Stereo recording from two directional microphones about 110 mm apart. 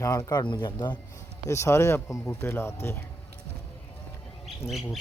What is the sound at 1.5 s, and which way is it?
Speech, 25° left (ahead or behind).